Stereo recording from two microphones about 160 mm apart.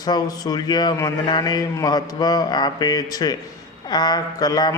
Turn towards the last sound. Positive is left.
turn(degrees=25)  # may be behind; listen again after turning